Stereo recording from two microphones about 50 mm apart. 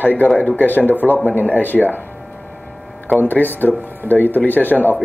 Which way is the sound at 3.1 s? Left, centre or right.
Left.